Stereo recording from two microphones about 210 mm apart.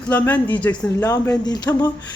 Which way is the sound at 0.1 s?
10° left (ahead or behind).